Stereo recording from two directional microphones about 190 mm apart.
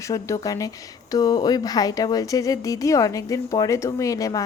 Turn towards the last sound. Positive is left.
turn(degrees=15)  # may be behind; listen again after turning